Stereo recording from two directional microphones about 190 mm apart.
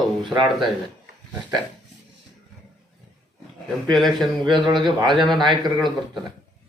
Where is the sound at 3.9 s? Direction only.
Centre (ahead or behind).